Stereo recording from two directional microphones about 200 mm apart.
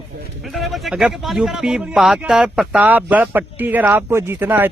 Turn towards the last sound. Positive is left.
turn(degrees=-10)  # may be behind; listen again after turning